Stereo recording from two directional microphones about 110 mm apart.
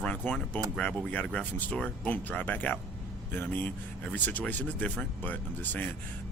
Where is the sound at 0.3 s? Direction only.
10° left (ahead or behind).